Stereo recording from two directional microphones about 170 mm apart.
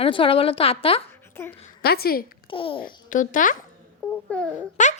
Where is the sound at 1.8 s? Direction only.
65° left (ahead or behind).